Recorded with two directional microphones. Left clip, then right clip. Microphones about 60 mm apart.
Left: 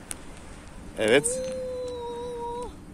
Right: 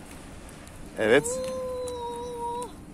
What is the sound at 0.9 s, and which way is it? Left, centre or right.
Speech, centre.